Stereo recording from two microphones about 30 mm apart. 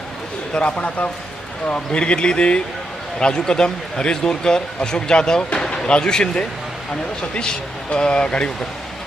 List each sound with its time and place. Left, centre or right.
0.5 s a man's voice: left
1.9 s a man's voice: left
5.5 s basketball bounce: left
5.9 s a man's voice: left